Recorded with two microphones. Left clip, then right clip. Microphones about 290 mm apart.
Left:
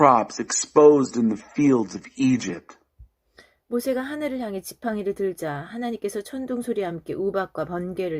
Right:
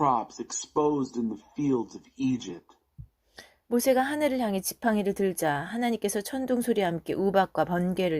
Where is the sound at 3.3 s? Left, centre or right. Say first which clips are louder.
Left 1 dB; right.